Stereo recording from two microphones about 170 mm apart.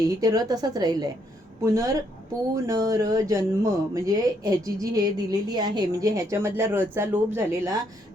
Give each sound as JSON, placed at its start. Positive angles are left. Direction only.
{"t": 0.2, "sound": "speech", "side_deg": -20}